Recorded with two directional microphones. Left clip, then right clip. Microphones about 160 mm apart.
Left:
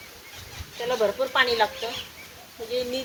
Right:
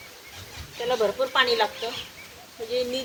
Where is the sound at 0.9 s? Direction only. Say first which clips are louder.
Even; 15° right (ahead or behind).